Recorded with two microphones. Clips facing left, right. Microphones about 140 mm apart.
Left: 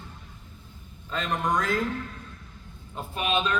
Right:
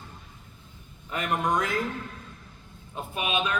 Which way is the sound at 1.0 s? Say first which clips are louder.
Right 1 dB; 15° right (ahead or behind).